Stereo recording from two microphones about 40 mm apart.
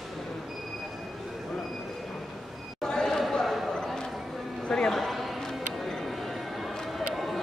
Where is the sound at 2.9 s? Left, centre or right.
Centre.